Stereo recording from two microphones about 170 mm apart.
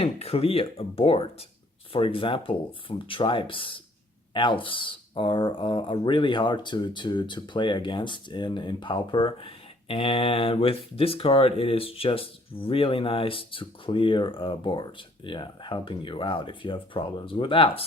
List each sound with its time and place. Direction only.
0.0 s speech: 35° left (ahead or behind)